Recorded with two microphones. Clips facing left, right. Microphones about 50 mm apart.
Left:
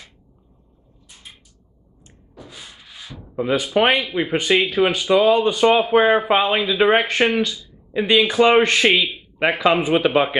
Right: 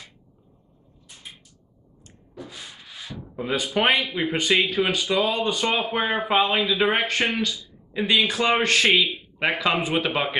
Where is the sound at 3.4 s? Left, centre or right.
Centre.